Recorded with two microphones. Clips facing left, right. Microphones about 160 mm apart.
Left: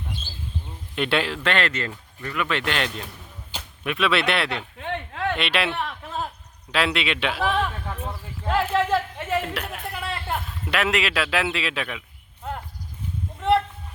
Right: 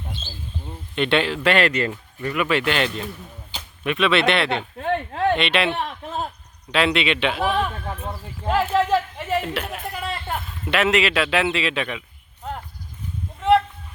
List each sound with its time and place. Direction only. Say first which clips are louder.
0.9 s a man's voice: right 3 dB; 5° left (ahead or behind)
1.4 s speech: right 5 dB; 10° right (ahead or behind)
4.8 s a sound: right 7 dB; 40° right (ahead or behind)
5.4 s a man's voice: right 3 dB; centre (ahead or behind)
7.4 s speech: right 2 dB; 15° right (ahead or behind)
9.1 s a man's voice: right 2 dB; centre (ahead or behind)